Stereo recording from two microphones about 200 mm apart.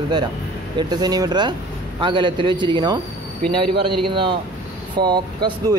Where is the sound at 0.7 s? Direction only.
20° right (ahead or behind).